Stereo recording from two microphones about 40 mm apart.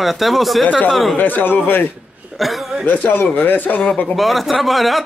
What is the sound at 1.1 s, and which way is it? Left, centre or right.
Speech, left.